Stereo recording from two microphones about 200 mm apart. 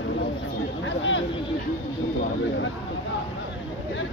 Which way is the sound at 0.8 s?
65° left (ahead or behind).